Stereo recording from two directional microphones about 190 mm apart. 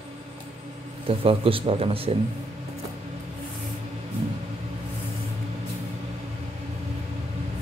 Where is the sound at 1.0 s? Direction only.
30° right (ahead or behind).